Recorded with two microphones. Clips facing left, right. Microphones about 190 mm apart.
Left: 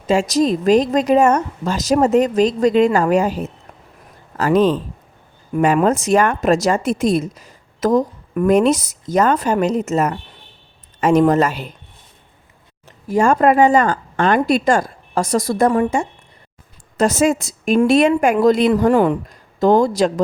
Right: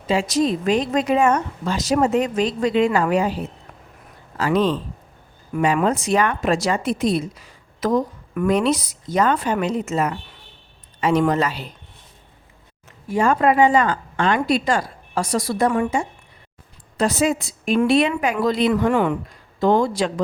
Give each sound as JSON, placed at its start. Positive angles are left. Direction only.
{"t": 0.1, "sound": "a woman's voice", "side_deg": 40}
{"t": 13.1, "sound": "a woman's voice", "side_deg": 45}